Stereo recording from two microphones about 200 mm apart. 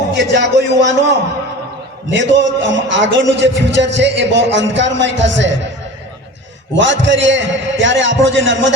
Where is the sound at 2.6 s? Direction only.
65° right (ahead or behind).